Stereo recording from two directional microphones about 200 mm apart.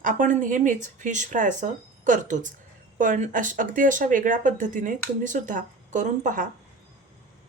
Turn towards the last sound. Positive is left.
turn(degrees=-40)  # may be behind; listen again after turning